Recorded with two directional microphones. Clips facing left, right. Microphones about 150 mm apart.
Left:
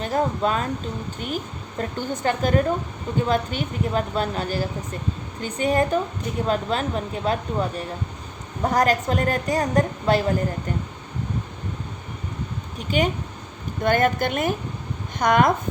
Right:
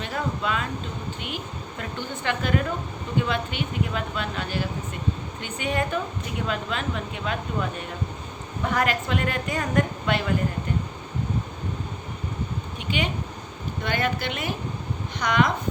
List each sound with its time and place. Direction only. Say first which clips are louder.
0.0 s a woman's voice: left 6 dB; 40° left (ahead or behind)
1.8 s a woman's voice: left 7 dB; 40° left (ahead or behind)
12.9 s speech: left 6 dB; 45° left (ahead or behind)